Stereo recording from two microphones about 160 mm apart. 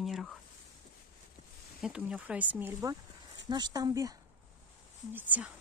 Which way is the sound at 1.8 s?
5° right (ahead or behind).